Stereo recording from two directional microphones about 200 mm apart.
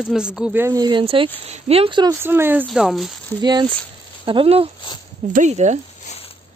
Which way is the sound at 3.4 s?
25° right (ahead or behind).